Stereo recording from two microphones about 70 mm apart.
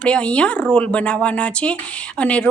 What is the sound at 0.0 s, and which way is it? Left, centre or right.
Speech, centre.